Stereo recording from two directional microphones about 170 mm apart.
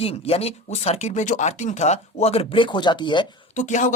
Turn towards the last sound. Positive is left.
turn(degrees=45)  # may be behind; listen again after turning